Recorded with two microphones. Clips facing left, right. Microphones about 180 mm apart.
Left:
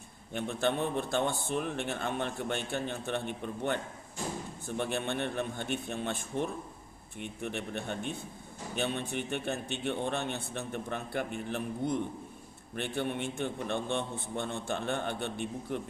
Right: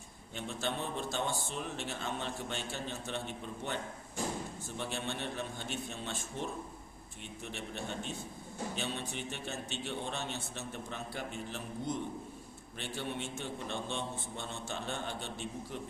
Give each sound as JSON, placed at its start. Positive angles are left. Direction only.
{"t": 0.3, "sound": "a man's voice", "side_deg": 60}
{"t": 4.8, "sound": "a man's voice", "side_deg": 55}